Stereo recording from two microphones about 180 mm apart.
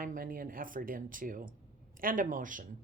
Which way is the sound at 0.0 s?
50° right (ahead or behind).